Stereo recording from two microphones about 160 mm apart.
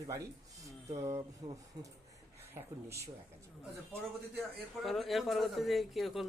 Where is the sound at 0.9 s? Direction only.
20° right (ahead or behind).